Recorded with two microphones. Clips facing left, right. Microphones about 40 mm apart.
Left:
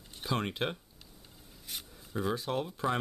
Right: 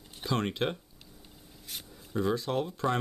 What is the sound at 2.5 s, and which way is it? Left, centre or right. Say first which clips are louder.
Speech: right 2 dB; centre.